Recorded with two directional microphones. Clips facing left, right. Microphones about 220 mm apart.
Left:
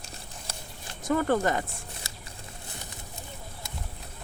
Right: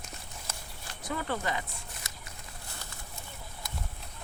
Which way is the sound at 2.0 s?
25° left (ahead or behind).